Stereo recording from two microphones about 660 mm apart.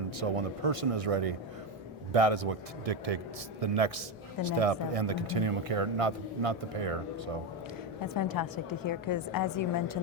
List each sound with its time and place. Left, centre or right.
0.2 s speech: right
8.0 s a woman's voice: left